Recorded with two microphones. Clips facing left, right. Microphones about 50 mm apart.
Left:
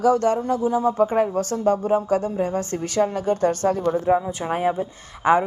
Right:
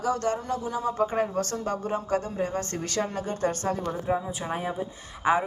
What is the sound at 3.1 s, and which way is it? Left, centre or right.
Speech, left.